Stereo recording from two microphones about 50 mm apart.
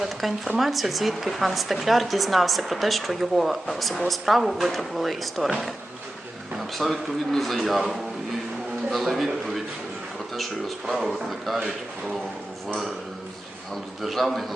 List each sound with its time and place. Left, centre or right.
0.0 s a woman's voice: centre
6.6 s a man's voice: centre
14.0 s a woman's voice: centre